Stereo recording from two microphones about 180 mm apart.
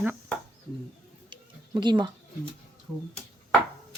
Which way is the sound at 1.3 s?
25° right (ahead or behind).